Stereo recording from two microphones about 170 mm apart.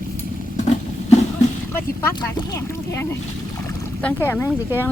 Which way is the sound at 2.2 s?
25° left (ahead or behind).